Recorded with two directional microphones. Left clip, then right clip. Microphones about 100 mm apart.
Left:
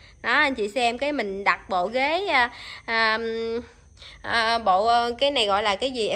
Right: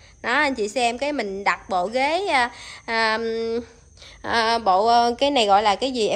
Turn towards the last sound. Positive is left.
turn(degrees=-35)  # may be behind; listen again after turning